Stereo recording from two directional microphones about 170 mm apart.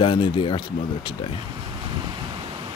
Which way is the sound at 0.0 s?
30° left (ahead or behind).